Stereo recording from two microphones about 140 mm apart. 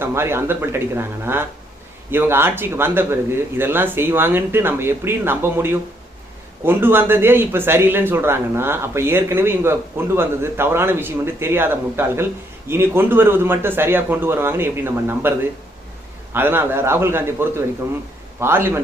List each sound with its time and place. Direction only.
0.0 s speech: 15° right (ahead or behind)
16.3 s speech: 15° right (ahead or behind)